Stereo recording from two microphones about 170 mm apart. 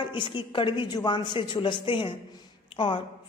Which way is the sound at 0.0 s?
30° left (ahead or behind).